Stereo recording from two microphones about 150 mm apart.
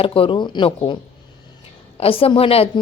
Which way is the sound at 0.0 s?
40° left (ahead or behind).